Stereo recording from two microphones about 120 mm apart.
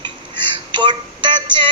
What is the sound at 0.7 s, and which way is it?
Music, 40° right (ahead or behind).